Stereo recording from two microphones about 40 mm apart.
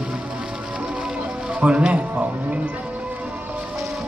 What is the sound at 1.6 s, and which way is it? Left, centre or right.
Speech, right.